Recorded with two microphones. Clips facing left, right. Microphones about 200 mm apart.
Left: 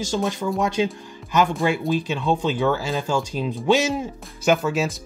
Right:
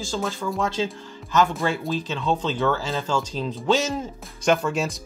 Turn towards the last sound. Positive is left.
turn(degrees=0)  # may be behind; listen again after turning